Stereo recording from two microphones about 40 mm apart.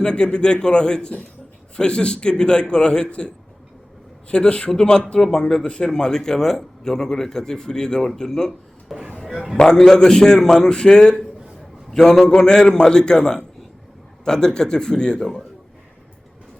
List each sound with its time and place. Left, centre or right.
0.0 s a man's voice: left
9.1 s a sound: centre
9.6 s a man's voice: centre
12.3 s a man's voice: centre